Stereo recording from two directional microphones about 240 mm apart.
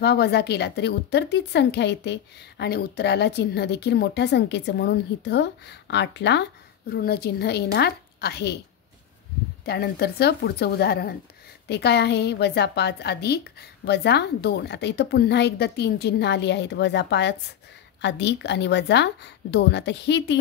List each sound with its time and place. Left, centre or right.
0.0 s a woman's voice: left
9.7 s a woman's voice: left